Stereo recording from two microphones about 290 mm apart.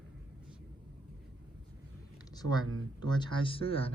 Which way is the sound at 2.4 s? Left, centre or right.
Right.